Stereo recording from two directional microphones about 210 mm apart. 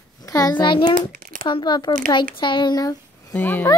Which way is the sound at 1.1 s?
40° right (ahead or behind).